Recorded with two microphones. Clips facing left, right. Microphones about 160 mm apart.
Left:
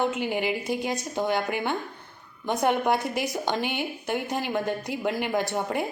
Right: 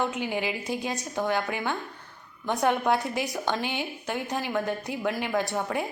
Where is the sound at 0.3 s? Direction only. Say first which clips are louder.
Left 3 dB; 15° left (ahead or behind).